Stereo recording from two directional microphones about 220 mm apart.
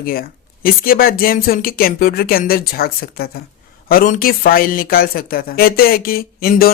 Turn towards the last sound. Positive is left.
turn(degrees=45)  # may be behind; listen again after turning